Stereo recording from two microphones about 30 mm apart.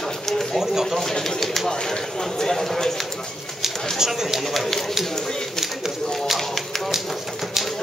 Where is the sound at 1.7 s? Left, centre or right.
Left.